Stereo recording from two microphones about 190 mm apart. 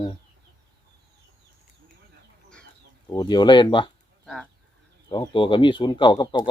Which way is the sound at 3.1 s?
20° left (ahead or behind).